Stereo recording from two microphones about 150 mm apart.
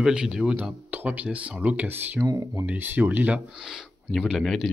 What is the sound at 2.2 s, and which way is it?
Speech, 20° right (ahead or behind).